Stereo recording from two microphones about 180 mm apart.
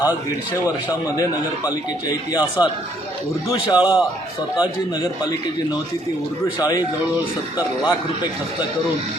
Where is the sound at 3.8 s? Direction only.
5° right (ahead or behind).